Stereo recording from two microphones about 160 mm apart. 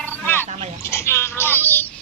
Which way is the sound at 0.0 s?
10° left (ahead or behind).